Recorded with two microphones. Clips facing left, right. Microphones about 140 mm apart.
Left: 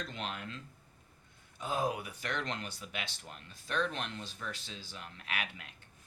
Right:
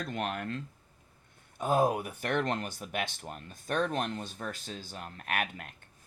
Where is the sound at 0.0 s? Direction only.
55° right (ahead or behind).